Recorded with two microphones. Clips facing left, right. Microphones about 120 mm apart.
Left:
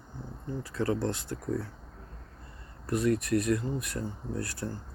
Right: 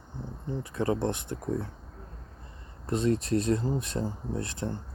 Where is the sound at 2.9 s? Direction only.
25° right (ahead or behind).